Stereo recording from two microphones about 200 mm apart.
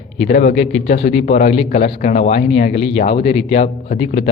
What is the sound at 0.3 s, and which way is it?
Speech, 40° left (ahead or behind).